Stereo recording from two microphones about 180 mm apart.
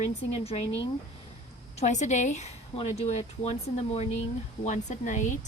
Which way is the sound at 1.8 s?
40° left (ahead or behind).